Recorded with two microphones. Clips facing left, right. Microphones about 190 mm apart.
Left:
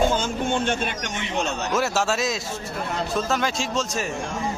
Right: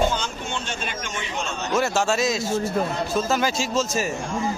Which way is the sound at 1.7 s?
5° left (ahead or behind).